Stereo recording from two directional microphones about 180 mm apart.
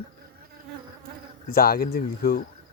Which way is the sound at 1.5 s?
55° left (ahead or behind).